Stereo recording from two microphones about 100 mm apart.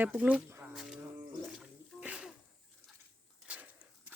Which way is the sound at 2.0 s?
10° right (ahead or behind).